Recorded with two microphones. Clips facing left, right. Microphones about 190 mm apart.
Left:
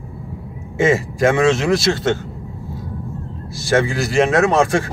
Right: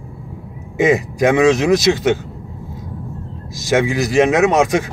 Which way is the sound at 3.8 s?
15° right (ahead or behind).